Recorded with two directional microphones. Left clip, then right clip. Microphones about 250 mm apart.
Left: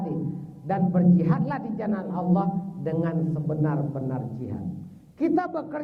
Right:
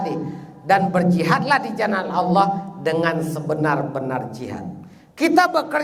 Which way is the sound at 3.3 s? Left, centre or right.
Centre.